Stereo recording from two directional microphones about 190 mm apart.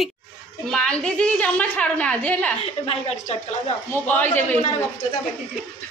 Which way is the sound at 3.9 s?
10° left (ahead or behind).